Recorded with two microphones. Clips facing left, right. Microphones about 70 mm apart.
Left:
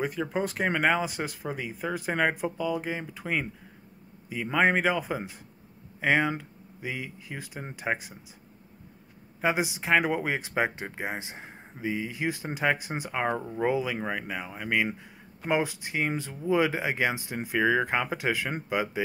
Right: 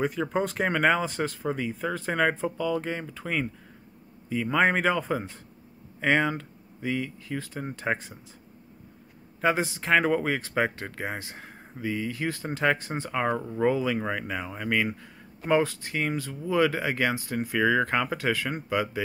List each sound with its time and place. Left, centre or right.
0.0 s speech: centre
9.4 s speech: centre